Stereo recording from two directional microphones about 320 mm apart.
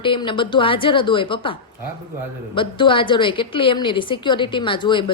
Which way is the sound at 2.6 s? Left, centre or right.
Centre.